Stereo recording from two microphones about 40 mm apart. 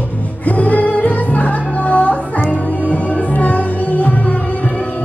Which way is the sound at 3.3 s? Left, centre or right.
Left.